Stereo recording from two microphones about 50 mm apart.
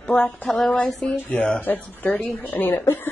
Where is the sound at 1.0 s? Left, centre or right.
Centre.